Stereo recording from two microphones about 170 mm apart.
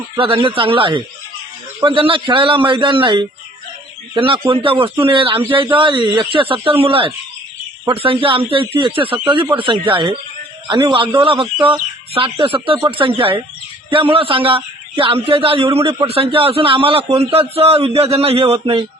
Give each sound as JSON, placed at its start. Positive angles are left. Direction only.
{"t": 0.2, "sound": "a man's voice", "side_deg": -35}